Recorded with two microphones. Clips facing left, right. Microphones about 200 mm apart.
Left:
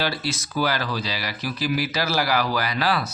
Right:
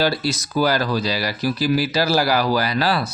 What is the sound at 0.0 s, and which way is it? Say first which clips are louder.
Speech: right 6 dB; 40° right (ahead or behind).